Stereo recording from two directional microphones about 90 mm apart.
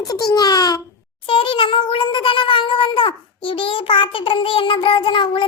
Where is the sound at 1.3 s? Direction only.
75° left (ahead or behind).